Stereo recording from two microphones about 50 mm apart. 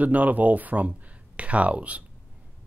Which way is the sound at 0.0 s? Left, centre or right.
Right.